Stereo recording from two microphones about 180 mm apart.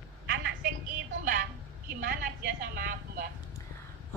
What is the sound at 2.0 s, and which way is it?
A woman's voice, 50° right (ahead or behind).